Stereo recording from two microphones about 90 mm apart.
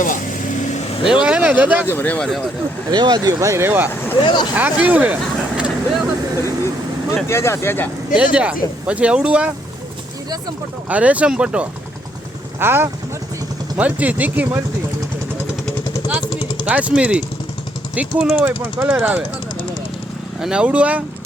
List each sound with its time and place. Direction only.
1.0 s speech: 10° right (ahead or behind)
1.9 s speech: 20° left (ahead or behind)
2.9 s speech: 55° right (ahead or behind)
3.4 s speech: 30° right (ahead or behind)
4.2 s speech: 55° left (ahead or behind)
4.5 s speech: 15° right (ahead or behind)
7.3 s speech: 30° left (ahead or behind)
8.1 s speech: 10° right (ahead or behind)
10.8 s speech: 15° right (ahead or behind)
12.5 s speech: 25° right (ahead or behind)
16.6 s speech: 15° right (ahead or behind)
20.4 s speech: 10° right (ahead or behind)